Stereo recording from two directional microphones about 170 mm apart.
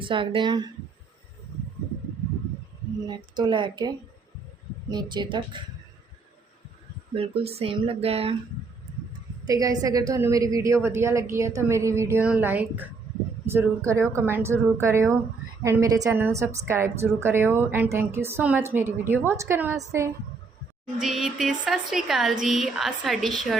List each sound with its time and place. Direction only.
0.0 s speech: 30° right (ahead or behind)
3.3 s speech: 25° right (ahead or behind)
7.2 s speech: 35° right (ahead or behind)
9.5 s a woman's voice: 20° right (ahead or behind)
21.0 s a woman's voice: centre (ahead or behind)